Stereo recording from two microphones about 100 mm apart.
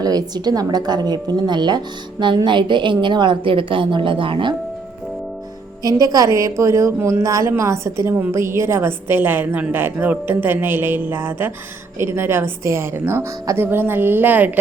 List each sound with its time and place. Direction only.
0.0 s a woman's voice: 40° right (ahead or behind); by 4.5 s 60° right (ahead or behind)
5.8 s a woman's voice: 35° right (ahead or behind); by 14.6 s 15° right (ahead or behind)